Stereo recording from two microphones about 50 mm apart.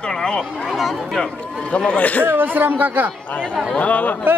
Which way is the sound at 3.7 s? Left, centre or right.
Left.